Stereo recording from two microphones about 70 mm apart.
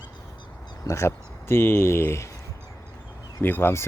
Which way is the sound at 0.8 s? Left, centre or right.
Left.